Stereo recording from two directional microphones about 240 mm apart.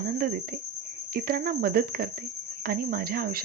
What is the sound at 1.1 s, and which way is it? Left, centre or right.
Speech, right.